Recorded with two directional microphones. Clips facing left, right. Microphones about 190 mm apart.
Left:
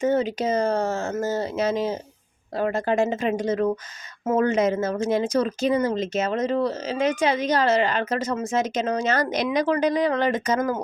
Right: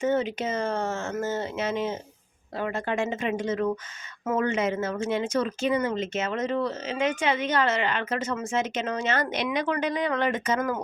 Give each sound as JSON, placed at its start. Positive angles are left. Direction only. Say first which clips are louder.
{"t": 0.0, "sound": "speech", "louder": "left 3 dB", "side_deg": 35}